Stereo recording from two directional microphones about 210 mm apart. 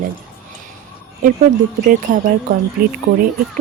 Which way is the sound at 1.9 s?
40° right (ahead or behind).